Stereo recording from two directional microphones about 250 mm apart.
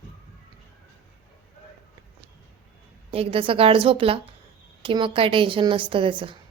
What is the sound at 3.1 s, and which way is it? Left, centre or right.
A woman's voice, right.